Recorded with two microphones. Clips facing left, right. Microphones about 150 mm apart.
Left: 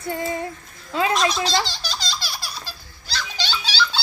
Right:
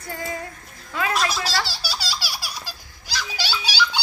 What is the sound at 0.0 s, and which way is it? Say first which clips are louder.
Speech: left 5 dB; 25° left (ahead or behind).